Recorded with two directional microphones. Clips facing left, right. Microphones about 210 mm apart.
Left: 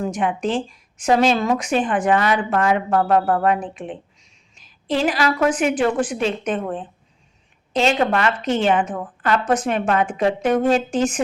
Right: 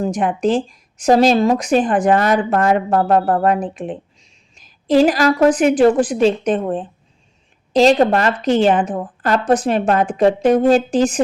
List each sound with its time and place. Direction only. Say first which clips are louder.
0.0 s speech: right 4 dB; 40° right (ahead or behind)